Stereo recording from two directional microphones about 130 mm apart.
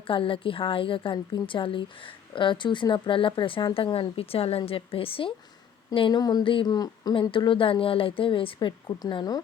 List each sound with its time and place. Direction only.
0.1 s a woman's voice: 40° left (ahead or behind)